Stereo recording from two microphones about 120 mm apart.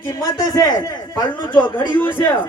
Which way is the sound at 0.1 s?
25° left (ahead or behind).